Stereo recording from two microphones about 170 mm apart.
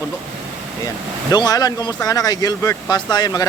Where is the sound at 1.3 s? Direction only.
25° left (ahead or behind).